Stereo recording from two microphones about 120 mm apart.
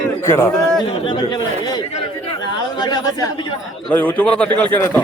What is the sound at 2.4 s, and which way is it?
Chatter, 35° left (ahead or behind).